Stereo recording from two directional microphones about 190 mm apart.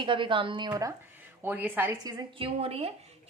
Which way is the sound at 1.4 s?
10° right (ahead or behind).